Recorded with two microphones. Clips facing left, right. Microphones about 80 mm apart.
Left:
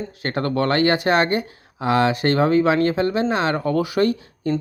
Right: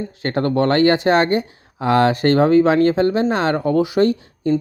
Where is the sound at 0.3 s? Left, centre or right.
Right.